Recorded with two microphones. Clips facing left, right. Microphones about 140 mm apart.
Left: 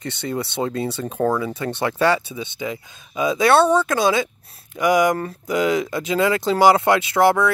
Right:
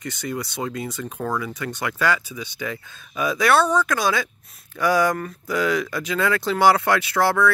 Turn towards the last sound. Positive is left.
turn(degrees=20)  # may be behind; listen again after turning